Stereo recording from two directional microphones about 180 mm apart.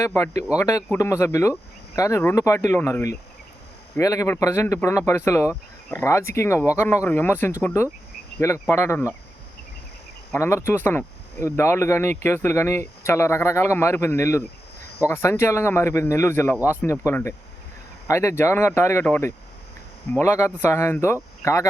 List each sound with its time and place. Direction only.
0.0 s speech: 15° left (ahead or behind)
10.3 s speech: 15° left (ahead or behind)